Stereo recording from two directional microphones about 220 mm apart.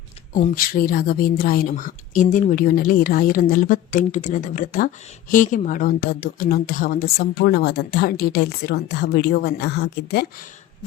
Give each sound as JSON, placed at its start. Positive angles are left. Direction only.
{"t": 0.3, "sound": "a woman's voice", "side_deg": 35}